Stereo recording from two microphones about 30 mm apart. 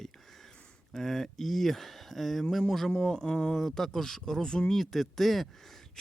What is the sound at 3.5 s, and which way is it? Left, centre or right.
Speech, centre.